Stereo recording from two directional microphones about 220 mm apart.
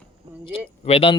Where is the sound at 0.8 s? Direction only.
25° left (ahead or behind).